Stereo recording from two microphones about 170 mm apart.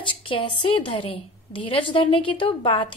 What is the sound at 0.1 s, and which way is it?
A woman's voice, 30° left (ahead or behind).